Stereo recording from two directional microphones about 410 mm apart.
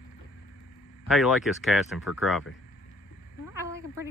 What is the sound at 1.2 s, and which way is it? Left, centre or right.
Speech, centre.